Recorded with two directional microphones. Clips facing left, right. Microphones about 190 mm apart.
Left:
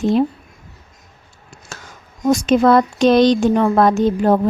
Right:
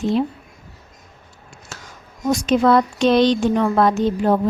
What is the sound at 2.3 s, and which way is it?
A woman's voice, 45° left (ahead or behind).